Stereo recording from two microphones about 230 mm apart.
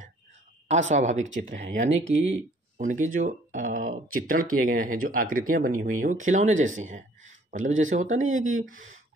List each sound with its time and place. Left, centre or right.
0.7 s speech: right
8.3 s speech: right